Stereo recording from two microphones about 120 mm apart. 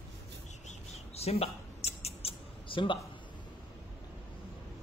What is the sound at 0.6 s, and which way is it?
Mouse, 65° left (ahead or behind).